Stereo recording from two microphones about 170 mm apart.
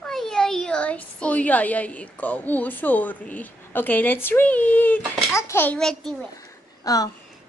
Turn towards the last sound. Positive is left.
turn(degrees=20)  # may be behind; listen again after turning